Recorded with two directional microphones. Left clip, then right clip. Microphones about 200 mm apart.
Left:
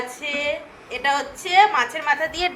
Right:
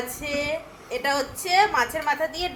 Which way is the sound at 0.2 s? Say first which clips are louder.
Left 2 dB; 5° right (ahead or behind).